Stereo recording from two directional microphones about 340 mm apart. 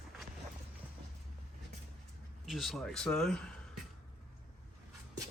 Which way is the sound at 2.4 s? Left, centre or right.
Centre.